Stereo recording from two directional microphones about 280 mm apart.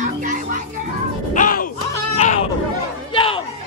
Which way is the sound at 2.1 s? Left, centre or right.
Left.